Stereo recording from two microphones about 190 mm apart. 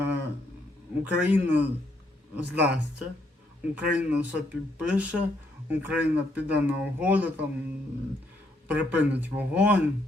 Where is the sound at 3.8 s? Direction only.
5° right (ahead or behind).